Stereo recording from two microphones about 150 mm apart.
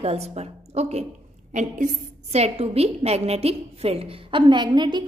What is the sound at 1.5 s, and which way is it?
A woman's voice, 55° right (ahead or behind).